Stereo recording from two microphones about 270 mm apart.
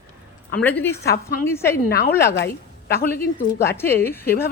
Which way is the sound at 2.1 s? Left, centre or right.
Centre.